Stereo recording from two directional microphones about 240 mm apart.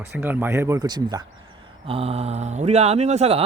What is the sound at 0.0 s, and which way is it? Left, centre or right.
Speech, centre.